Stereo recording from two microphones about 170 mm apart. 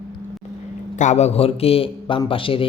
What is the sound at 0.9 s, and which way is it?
A man's voice, 40° left (ahead or behind).